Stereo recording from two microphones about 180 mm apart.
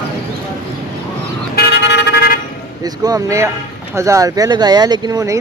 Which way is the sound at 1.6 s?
70° left (ahead or behind).